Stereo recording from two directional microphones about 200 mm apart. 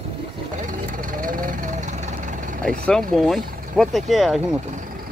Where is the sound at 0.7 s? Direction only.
40° right (ahead or behind).